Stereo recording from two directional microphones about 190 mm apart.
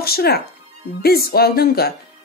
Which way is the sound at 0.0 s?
55° left (ahead or behind).